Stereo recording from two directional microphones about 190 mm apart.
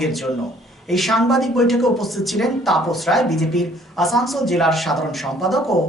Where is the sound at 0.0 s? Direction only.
Centre (ahead or behind).